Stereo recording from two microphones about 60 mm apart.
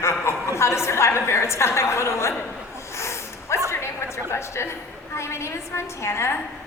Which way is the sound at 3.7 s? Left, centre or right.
Left.